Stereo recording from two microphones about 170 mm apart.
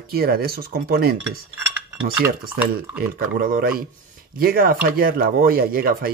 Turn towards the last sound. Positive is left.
turn(degrees=-60)  # may be behind; listen again after turning